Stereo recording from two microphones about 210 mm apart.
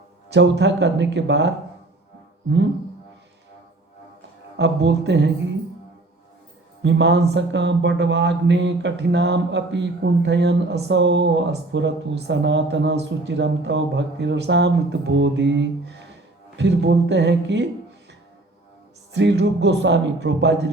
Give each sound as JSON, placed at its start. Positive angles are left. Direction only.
{"t": 0.3, "sound": "speech", "side_deg": -55}
{"t": 4.5, "sound": "speech", "side_deg": -55}
{"t": 6.8, "sound": "speech", "side_deg": -55}
{"t": 19.1, "sound": "speech", "side_deg": -55}